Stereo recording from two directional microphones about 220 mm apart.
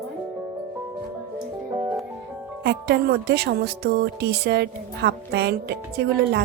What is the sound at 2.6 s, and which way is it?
Speech, 50° right (ahead or behind).